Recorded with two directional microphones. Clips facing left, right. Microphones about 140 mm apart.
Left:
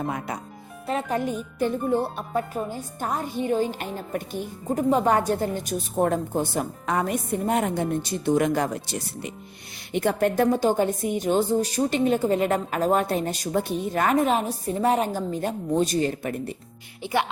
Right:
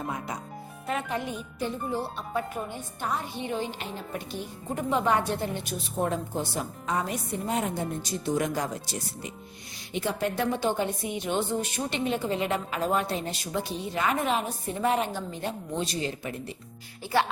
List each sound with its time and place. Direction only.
0.9 s a woman's voice: 40° left (ahead or behind)
2.3 s a woman's voice: 40° left (ahead or behind)
17.0 s a woman's voice: 20° left (ahead or behind)